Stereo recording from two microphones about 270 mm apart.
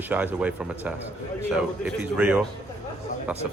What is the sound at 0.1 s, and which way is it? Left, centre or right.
Speech, centre.